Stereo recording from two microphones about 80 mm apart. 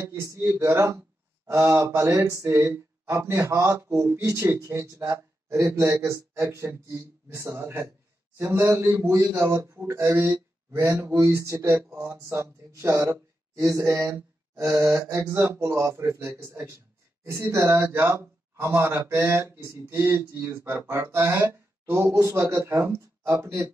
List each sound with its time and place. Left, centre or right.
0.0 s speech: right
3.9 s speech: right
4.3 s speech: right
10.7 s speech: right
20.6 s speech: right